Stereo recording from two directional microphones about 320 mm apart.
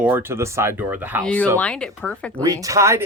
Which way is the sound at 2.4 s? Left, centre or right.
Centre.